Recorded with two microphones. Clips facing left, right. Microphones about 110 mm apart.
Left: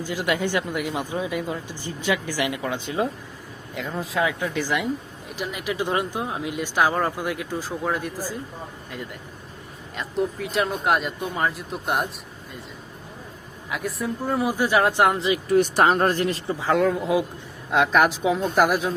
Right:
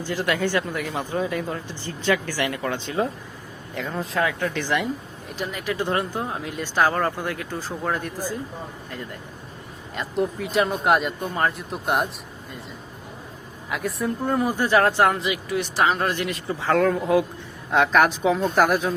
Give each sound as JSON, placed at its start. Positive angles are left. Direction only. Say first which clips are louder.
{"t": 0.0, "sound": "speech", "louder": "right 1 dB", "side_deg": 15}
{"t": 9.9, "sound": "speech", "louder": "right 1 dB", "side_deg": 0}
{"t": 13.7, "sound": "speech", "louder": "right 2 dB", "side_deg": 0}
{"t": 15.4, "sound": "speech", "louder": "left 5 dB", "side_deg": 50}
{"t": 16.6, "sound": "speech", "louder": "right 1 dB", "side_deg": 5}